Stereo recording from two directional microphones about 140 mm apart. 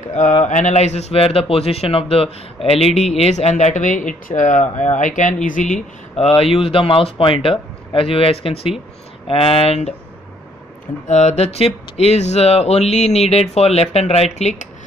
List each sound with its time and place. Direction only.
0.1 s speech: 55° left (ahead or behind)
6.1 s speech: 45° left (ahead or behind)
11.1 s speech: 55° left (ahead or behind)